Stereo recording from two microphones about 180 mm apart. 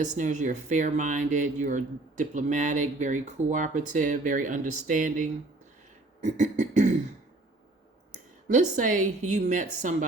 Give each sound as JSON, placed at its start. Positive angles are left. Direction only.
{"t": 0.0, "sound": "speech", "side_deg": -45}
{"t": 8.1, "sound": "a woman's voice", "side_deg": -45}